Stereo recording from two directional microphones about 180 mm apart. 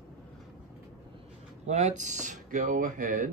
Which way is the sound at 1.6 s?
40° right (ahead or behind).